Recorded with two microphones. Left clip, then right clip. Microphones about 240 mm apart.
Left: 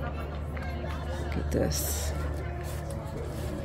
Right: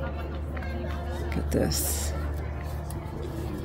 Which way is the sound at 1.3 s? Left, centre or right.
Centre.